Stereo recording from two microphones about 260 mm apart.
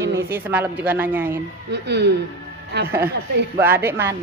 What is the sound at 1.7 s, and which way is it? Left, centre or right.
Speech, right.